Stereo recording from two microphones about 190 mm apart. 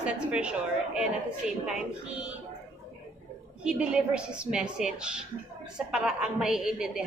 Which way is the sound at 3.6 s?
5° right (ahead or behind).